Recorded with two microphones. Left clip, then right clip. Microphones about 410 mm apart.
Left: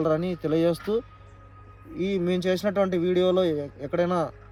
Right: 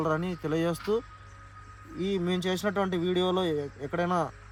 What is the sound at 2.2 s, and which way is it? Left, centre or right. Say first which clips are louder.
Speech: left 6 dB; centre.